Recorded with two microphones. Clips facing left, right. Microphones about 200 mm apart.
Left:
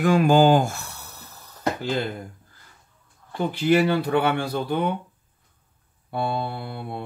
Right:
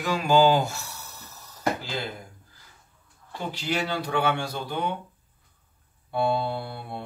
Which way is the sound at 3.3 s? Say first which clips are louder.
Left 10 dB; 55° left (ahead or behind).